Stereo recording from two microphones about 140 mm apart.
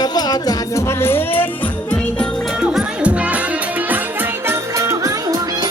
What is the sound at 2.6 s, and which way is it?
Music, 5° right (ahead or behind).